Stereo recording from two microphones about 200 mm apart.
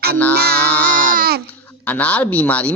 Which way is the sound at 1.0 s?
45° right (ahead or behind).